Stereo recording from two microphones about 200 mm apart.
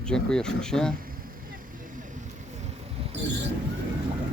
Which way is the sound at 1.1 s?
45° right (ahead or behind).